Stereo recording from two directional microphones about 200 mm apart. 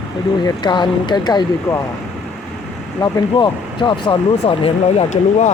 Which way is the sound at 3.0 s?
20° left (ahead or behind).